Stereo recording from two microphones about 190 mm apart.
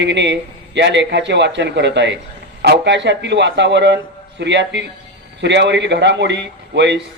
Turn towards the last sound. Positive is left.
turn(degrees=-65)  # may be behind; listen again after turning